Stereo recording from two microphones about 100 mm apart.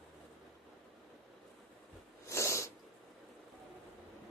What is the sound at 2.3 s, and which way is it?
Sneeze, 30° left (ahead or behind).